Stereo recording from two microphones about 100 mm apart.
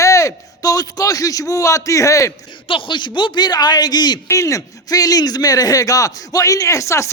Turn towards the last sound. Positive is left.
turn(degrees=30)  # may be behind; listen again after turning